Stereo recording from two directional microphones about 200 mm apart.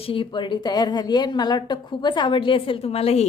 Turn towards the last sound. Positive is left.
turn(degrees=30)  # may be behind; listen again after turning